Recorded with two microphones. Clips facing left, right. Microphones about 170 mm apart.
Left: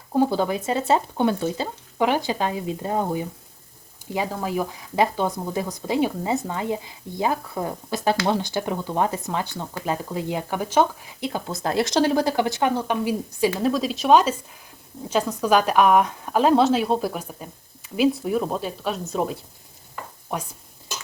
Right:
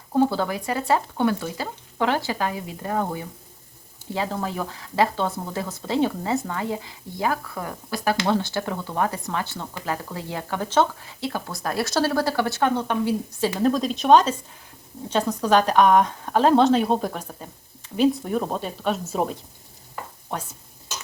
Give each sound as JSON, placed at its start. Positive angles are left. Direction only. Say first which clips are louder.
{"t": 0.1, "sound": "a woman's voice", "louder": "left 1 dB", "side_deg": 15}
{"t": 13.6, "sound": "a woman's voice", "louder": "right 1 dB", "side_deg": 0}